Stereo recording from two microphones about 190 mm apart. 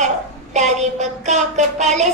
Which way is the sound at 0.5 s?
40° right (ahead or behind).